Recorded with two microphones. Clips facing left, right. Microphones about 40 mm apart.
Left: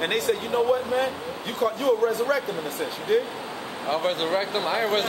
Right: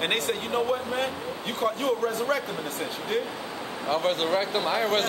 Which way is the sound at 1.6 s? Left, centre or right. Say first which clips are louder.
Left 4 dB; right.